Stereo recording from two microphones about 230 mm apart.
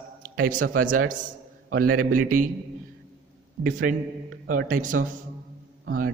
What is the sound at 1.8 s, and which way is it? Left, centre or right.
Speech, right.